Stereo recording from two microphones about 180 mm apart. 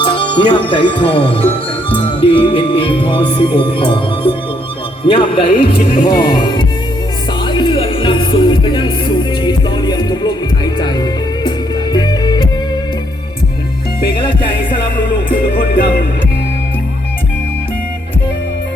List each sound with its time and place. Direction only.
0.0 s speech: 30° left (ahead or behind)
2.0 s music: 30° left (ahead or behind)
6.1 s speech: 25° left (ahead or behind)
7.4 s music: 25° left (ahead or behind)